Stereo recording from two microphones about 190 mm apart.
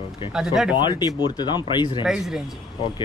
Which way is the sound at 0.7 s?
25° left (ahead or behind).